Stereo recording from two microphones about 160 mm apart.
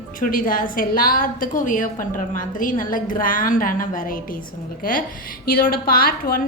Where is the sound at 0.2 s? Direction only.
60° left (ahead or behind).